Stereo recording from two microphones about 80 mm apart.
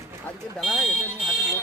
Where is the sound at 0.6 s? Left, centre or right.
Centre.